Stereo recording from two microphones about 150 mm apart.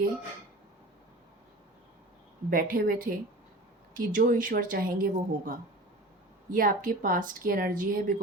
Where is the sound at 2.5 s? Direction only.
70° right (ahead or behind).